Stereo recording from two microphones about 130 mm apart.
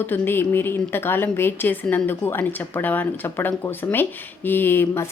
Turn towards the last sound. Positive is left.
turn(degrees=15)  # may be behind; listen again after turning